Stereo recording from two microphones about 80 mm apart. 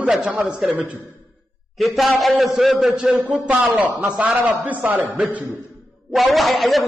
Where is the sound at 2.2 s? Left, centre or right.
Centre.